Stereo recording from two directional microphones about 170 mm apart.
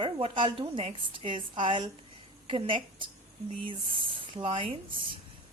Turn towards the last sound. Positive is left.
turn(degrees=-30)  # may be behind; listen again after turning